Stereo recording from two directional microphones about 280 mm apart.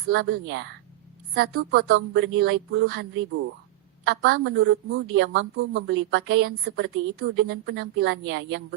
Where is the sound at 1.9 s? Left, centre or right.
Right.